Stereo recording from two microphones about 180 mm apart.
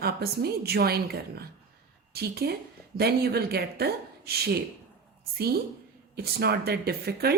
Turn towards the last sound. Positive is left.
turn(degrees=-60)  # may be behind; listen again after turning